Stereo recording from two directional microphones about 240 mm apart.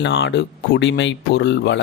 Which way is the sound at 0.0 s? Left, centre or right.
Left.